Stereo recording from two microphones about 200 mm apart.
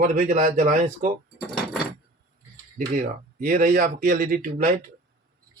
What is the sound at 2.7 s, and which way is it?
Speech, 40° right (ahead or behind).